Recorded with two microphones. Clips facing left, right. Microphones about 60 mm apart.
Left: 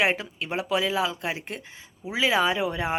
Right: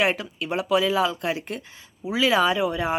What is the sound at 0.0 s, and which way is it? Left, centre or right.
Speech, left.